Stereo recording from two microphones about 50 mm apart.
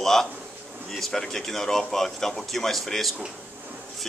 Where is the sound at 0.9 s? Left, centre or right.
Centre.